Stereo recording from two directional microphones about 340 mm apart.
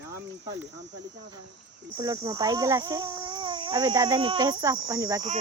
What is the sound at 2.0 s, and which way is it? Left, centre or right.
Speech, centre.